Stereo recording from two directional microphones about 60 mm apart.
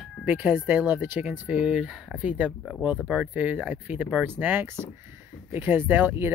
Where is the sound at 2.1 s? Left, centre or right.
Right.